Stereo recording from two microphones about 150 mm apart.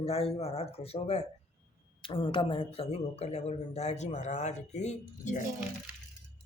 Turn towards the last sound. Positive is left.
turn(degrees=55)  # may be behind; listen again after turning